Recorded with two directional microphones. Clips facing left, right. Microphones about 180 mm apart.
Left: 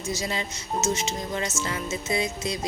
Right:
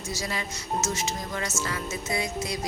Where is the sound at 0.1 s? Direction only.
25° left (ahead or behind).